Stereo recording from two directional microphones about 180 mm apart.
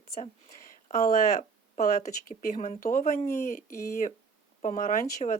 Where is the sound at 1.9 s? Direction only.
40° left (ahead or behind).